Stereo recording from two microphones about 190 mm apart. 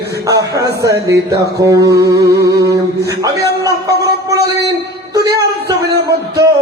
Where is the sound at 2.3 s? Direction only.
60° right (ahead or behind).